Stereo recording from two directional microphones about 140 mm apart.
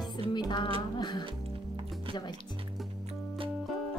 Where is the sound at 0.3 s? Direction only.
35° left (ahead or behind).